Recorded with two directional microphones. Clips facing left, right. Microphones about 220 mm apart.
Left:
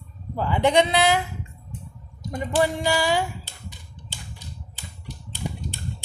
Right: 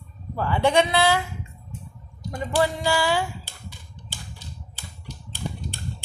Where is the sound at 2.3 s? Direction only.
20° left (ahead or behind).